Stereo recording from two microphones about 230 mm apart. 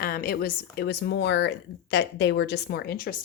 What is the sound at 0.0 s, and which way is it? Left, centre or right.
A woman's voice, left.